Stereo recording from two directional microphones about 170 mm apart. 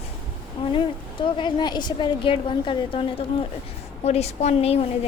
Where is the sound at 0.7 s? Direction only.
30° left (ahead or behind).